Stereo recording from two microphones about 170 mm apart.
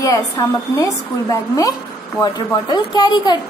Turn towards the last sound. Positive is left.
turn(degrees=25)  # may be behind; listen again after turning